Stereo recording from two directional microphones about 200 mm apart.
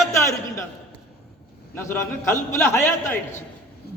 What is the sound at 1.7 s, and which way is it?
A man's voice, 10° left (ahead or behind).